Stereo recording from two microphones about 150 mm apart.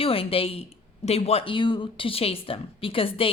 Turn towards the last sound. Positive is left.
turn(degrees=40)  # may be behind; listen again after turning